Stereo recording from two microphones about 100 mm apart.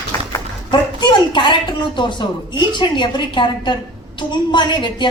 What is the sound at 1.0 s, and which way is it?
A woman's voice, 50° left (ahead or behind).